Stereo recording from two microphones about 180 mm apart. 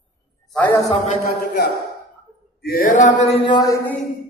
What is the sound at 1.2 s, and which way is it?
A man's voice, 55° left (ahead or behind).